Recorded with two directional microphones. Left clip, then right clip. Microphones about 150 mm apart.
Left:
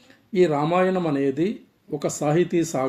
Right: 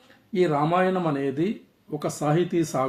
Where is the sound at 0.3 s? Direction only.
30° left (ahead or behind).